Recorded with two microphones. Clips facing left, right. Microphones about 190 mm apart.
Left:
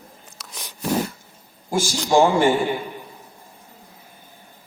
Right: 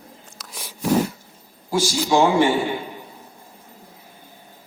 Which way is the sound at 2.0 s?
50° left (ahead or behind).